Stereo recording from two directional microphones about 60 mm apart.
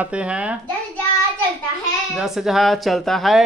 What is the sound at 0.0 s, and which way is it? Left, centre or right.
Speech, centre.